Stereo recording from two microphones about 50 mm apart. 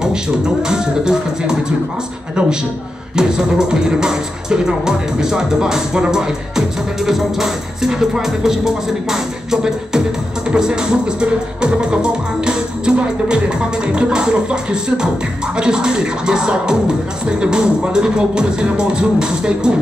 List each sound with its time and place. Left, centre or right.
0.0 s music: centre
3.2 s music: centre